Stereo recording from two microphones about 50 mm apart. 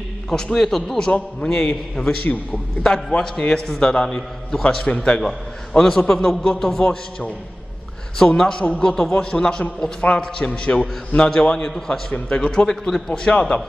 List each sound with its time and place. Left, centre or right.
0.3 s a man's voice: centre
1.4 s a man's voice: left
2.0 s a man's voice: centre
8.4 s a man's voice: centre